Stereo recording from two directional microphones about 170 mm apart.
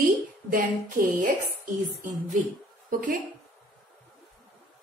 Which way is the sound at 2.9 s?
55° right (ahead or behind).